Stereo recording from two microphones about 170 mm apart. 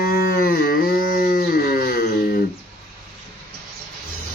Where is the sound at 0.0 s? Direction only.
65° left (ahead or behind).